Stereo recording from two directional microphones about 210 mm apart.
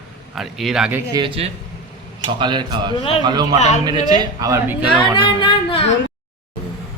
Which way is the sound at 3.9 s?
20° right (ahead or behind).